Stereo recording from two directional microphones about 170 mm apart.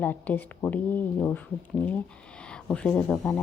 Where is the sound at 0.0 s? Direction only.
10° left (ahead or behind).